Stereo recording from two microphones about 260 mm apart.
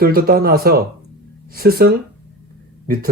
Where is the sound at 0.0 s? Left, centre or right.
Right.